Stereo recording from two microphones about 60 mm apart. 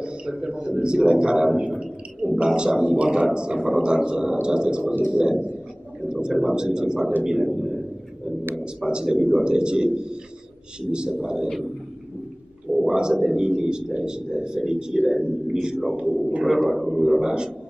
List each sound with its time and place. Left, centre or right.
0.0 s a sound: centre
2.3 s a man's voice: centre
12.9 s a man's voice: centre
16.0 s a man's voice: right
16.5 s a man's voice: centre